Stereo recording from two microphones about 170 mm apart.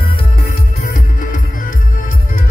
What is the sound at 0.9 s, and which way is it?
Music, 50° left (ahead or behind).